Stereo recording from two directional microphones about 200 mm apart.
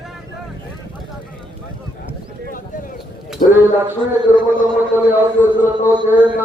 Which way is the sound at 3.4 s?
45° left (ahead or behind).